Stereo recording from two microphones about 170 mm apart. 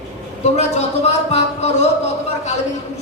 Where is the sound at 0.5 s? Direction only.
40° left (ahead or behind).